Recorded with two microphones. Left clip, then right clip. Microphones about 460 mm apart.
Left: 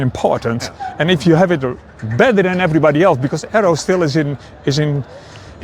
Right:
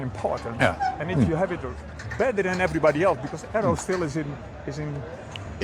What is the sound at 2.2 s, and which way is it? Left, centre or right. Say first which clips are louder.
Speech: left 12 dB; left.